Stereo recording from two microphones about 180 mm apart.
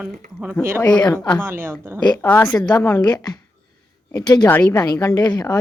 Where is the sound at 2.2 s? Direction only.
15° left (ahead or behind).